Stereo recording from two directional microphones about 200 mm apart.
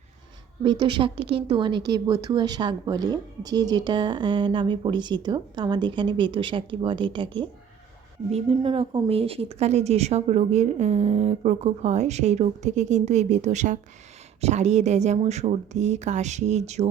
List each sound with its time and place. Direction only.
0.6 s a woman's voice: 25° right (ahead or behind)